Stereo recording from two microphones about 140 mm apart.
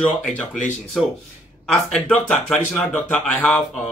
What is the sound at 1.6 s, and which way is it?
Speech, 10° left (ahead or behind).